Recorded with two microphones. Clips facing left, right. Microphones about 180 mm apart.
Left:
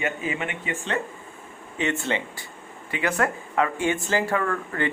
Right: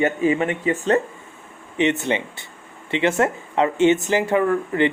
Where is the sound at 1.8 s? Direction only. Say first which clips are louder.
Right 6 dB; 20° right (ahead or behind).